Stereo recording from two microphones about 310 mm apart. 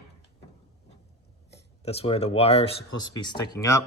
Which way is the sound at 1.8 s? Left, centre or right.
Centre.